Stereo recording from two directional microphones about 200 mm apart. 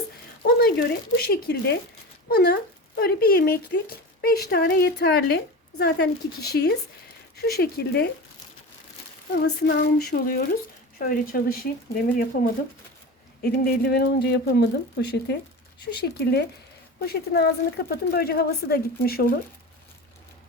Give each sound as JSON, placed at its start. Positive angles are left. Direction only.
{"t": 0.4, "sound": "speech", "side_deg": 50}
{"t": 9.3, "sound": "speech", "side_deg": 50}
{"t": 13.4, "sound": "speech", "side_deg": 50}
{"t": 17.0, "sound": "speech", "side_deg": 55}